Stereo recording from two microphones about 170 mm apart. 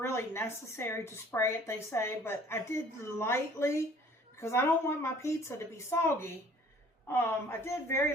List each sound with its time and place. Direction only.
0.0 s a woman's voice: 15° left (ahead or behind)